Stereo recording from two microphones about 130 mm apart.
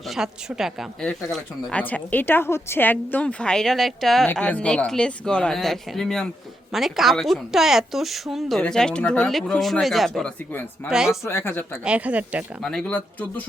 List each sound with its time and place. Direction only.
0.1 s speech: 5° right (ahead or behind)
1.0 s speech: 10° left (ahead or behind)
11.3 s speech: 20° left (ahead or behind)
11.9 s speech: 10° right (ahead or behind)
12.6 s speech: 10° left (ahead or behind)